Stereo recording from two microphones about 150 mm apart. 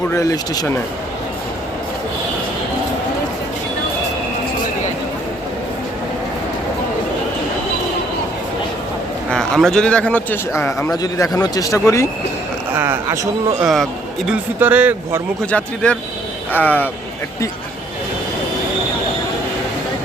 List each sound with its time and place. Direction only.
0.1 s speech: 20° left (ahead or behind)
9.3 s a man's voice: 5° left (ahead or behind); by 12.0 s 20° left (ahead or behind)
12.7 s a man's voice: 15° right (ahead or behind)
14.3 s a man's voice: 10° right (ahead or behind)
15.4 s a man's voice: 10° left (ahead or behind)